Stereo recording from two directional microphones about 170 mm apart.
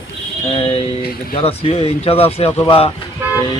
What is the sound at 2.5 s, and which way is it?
Speech, 15° left (ahead or behind).